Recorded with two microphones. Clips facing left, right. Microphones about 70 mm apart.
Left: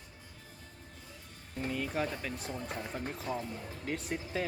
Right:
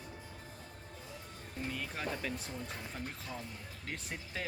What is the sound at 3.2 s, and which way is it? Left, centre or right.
Speech, centre.